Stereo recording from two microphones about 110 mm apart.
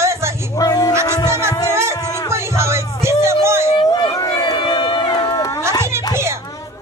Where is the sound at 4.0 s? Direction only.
40° left (ahead or behind).